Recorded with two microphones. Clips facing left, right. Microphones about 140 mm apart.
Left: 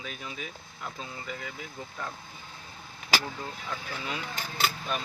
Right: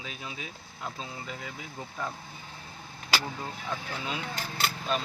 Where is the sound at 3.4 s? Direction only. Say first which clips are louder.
Right 2 dB; 20° right (ahead or behind).